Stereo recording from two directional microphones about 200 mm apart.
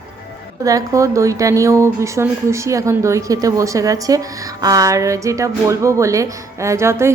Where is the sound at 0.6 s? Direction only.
15° right (ahead or behind).